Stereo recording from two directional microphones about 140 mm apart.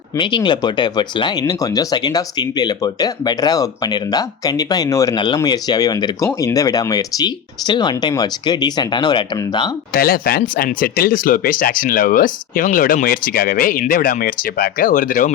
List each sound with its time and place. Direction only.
0.2 s speech: 35° left (ahead or behind)
9.9 s speech: 90° left; by 15.3 s 75° left (ahead or behind)